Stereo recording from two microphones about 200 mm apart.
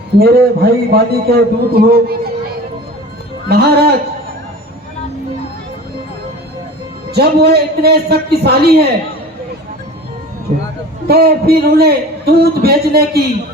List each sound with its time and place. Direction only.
0.2 s a man's voice: 50° right (ahead or behind)
3.5 s a man's voice: 50° right (ahead or behind)
7.1 s a man's voice: 55° right (ahead or behind)
11.1 s a man's voice: 50° right (ahead or behind)